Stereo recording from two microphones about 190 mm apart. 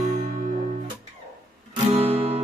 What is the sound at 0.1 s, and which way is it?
Music, 45° right (ahead or behind).